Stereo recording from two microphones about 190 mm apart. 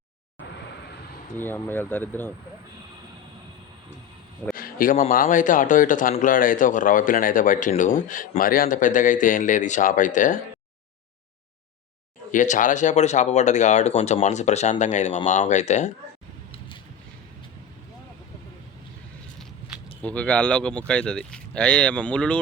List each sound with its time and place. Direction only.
1.4 s speech: 10° left (ahead or behind)
4.5 s speech: 50° left (ahead or behind)
12.3 s speech: 40° left (ahead or behind)
19.4 s speech: 5° left (ahead or behind)